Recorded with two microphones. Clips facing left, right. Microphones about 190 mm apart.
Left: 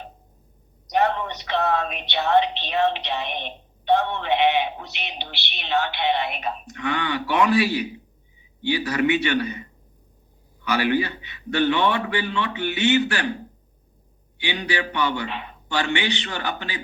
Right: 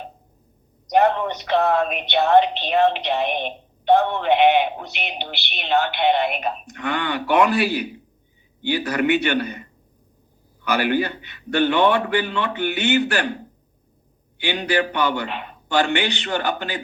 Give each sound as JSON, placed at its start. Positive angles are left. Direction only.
{"t": 0.9, "sound": "speech", "side_deg": -55}
{"t": 10.7, "sound": "speech", "side_deg": -50}
{"t": 14.3, "sound": "speech", "side_deg": -55}